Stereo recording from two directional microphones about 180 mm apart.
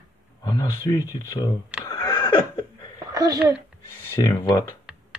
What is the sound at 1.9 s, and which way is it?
Neigh, 20° left (ahead or behind).